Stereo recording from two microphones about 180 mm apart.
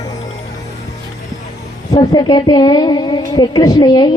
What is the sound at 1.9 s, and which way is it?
A woman's voice, 25° left (ahead or behind).